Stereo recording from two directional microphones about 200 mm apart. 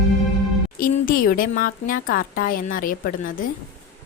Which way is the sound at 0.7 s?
45° left (ahead or behind).